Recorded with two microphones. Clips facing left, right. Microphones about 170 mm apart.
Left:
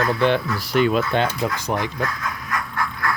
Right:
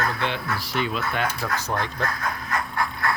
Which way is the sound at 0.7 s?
55° left (ahead or behind).